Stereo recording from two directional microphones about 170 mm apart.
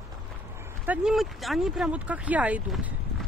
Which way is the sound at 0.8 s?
5° right (ahead or behind).